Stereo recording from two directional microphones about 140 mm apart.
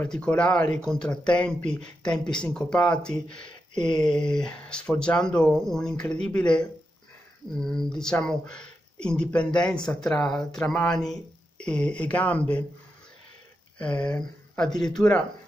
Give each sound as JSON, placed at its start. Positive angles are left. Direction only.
{"t": 0.0, "sound": "speech", "side_deg": 10}
{"t": 3.4, "sound": "a sound", "side_deg": 35}
{"t": 4.1, "sound": "speech", "side_deg": 5}
{"t": 13.7, "sound": "speech", "side_deg": 10}